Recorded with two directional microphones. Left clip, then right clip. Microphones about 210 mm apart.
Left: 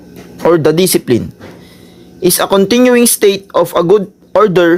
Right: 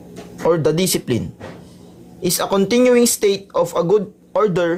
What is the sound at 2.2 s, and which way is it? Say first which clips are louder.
Speech: left 8 dB; 25° left (ahead or behind).